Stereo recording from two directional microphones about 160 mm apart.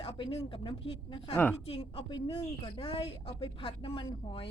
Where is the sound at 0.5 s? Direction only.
35° left (ahead or behind).